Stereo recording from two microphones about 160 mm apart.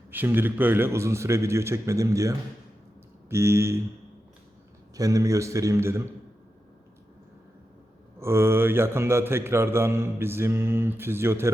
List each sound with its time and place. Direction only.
0.1 s a man's voice: 10° right (ahead or behind)
4.9 s speech: 20° right (ahead or behind)
8.2 s a man's voice: 15° right (ahead or behind)